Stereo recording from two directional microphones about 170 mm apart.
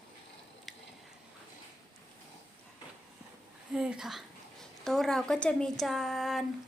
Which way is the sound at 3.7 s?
5° right (ahead or behind).